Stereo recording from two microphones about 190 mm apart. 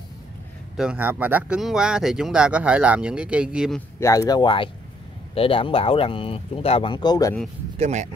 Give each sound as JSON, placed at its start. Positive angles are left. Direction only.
{"t": 0.7, "sound": "speech", "side_deg": -5}
{"t": 4.0, "sound": "speech", "side_deg": 15}
{"t": 7.7, "sound": "speech", "side_deg": -35}